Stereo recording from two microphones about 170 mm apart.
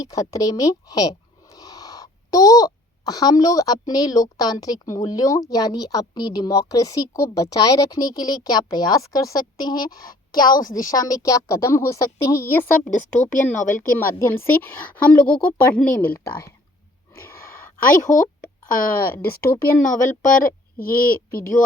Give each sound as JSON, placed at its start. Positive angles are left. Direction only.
{"t": 0.0, "sound": "speech", "side_deg": 20}
{"t": 10.7, "sound": "speech", "side_deg": 50}
{"t": 10.9, "sound": "a woman's voice", "side_deg": 20}
{"t": 17.7, "sound": "a woman's voice", "side_deg": 55}
{"t": 19.1, "sound": "a woman's voice", "side_deg": 10}
{"t": 19.9, "sound": "speech", "side_deg": 50}